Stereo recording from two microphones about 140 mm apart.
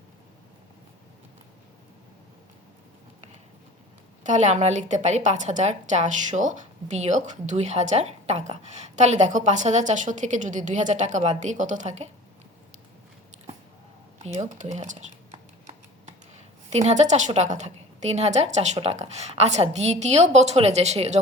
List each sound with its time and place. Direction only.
4.2 s a woman's voice: 60° right (ahead or behind)
14.3 s computer keyboard: 60° right (ahead or behind)
16.6 s a woman's voice: 55° right (ahead or behind)